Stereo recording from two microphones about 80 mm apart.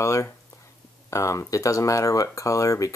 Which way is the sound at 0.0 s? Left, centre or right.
Left.